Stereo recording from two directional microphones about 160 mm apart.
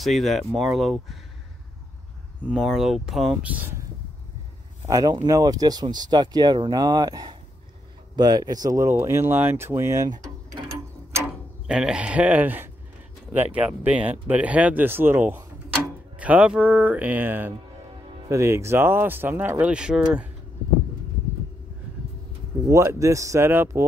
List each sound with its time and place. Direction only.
0.0 s speech: centre (ahead or behind)
2.4 s speech: 5° right (ahead or behind)
4.8 s speech: 20° right (ahead or behind)
11.6 s speech: 5° right (ahead or behind)
22.7 s speech: 20° right (ahead or behind)